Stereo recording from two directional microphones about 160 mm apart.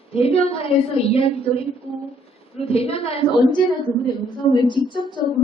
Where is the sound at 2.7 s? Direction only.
35° left (ahead or behind).